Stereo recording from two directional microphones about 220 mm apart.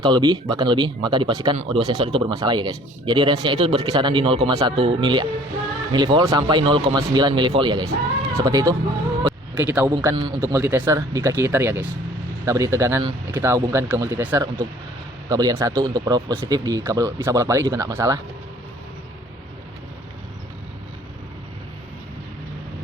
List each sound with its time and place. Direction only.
0.0 s speech: 20° right (ahead or behind)
9.2 s a sound: 10° right (ahead or behind)
10.0 s speech: 15° right (ahead or behind)